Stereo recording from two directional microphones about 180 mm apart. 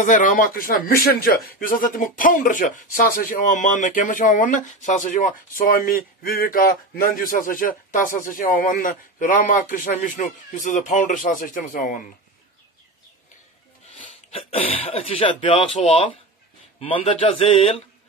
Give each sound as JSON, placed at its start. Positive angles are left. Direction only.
{"t": 0.0, "sound": "speech", "side_deg": 45}
{"t": 14.9, "sound": "speech", "side_deg": 30}